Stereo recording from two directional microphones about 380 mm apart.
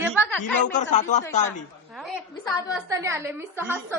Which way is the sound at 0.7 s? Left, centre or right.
Centre.